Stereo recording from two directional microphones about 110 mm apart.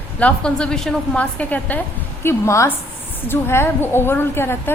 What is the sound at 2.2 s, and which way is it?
A woman's voice, 25° left (ahead or behind).